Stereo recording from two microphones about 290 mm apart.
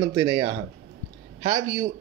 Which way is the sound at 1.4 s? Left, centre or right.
Centre.